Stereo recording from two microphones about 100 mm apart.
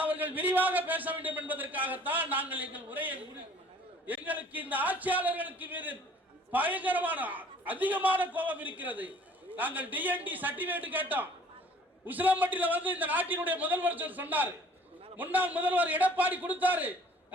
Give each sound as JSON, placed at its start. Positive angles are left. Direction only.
{"t": 0.0, "sound": "a man's voice", "side_deg": -15}